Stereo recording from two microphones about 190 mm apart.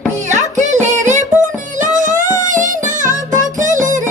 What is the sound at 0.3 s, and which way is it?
Music, 40° right (ahead or behind).